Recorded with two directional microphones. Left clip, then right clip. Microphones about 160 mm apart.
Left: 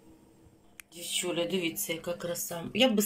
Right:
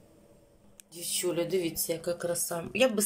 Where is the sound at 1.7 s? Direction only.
20° right (ahead or behind).